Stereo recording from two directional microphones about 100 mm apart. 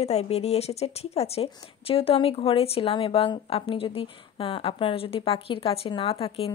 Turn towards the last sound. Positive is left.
turn(degrees=70)  # may be behind; listen again after turning